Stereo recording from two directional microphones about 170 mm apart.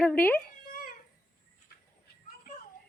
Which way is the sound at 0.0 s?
10° left (ahead or behind).